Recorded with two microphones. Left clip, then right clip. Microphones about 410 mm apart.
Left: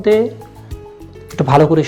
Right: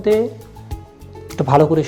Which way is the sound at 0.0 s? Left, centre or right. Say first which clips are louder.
Left 3 dB; right.